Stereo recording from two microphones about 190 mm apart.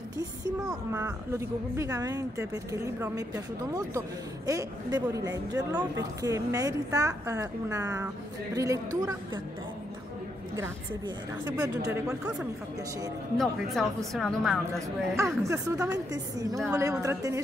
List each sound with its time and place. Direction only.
1.0 s speech: 15° right (ahead or behind)
11.4 s a woman's voice: 20° right (ahead or behind); by 14.6 s centre (ahead or behind)
15.1 s speech: 15° right (ahead or behind)